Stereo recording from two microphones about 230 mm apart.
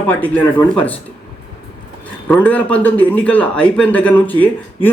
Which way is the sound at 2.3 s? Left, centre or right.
Centre.